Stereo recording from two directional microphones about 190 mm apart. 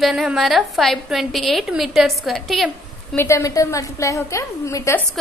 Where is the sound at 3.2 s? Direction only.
15° left (ahead or behind).